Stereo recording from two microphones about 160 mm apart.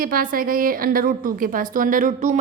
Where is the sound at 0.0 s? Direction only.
60° right (ahead or behind).